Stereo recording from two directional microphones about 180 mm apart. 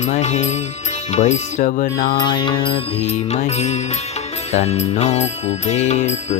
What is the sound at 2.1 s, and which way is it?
Music, 25° left (ahead or behind).